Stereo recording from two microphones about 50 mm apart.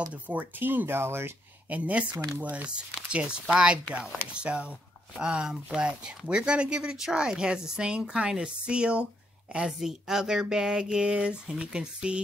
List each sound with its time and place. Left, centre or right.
0.1 s speech: right
1.7 s speech: right
9.7 s speech: centre